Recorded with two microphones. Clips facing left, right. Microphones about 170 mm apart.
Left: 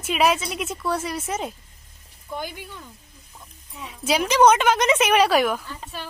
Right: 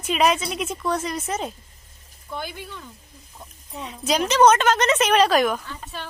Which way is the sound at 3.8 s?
10° left (ahead or behind).